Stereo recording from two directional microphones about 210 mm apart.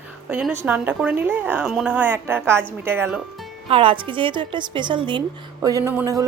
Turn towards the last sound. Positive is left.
turn(degrees=-15)  # may be behind; listen again after turning